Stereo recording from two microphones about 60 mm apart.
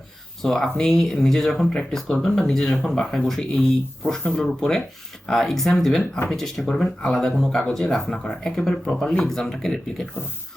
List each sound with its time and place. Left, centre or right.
0.4 s speech: centre